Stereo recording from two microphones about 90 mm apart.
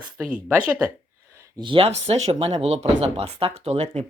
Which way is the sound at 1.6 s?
75° right (ahead or behind).